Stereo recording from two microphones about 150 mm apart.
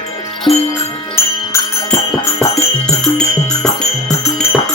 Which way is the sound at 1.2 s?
20° left (ahead or behind).